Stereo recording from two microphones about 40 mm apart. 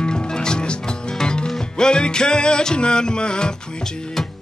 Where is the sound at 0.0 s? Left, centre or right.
Left.